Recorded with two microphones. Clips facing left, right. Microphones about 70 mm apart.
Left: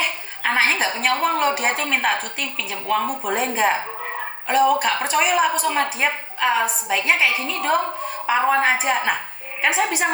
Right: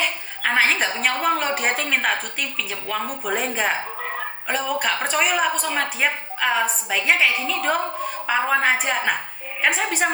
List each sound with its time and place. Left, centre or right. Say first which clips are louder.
0.4 s a woman's voice: even; centre